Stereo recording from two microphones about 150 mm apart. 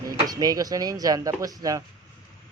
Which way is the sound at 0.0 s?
25° right (ahead or behind).